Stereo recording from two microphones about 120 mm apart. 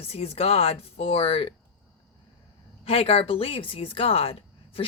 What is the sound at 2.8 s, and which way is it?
Speech, 50° left (ahead or behind).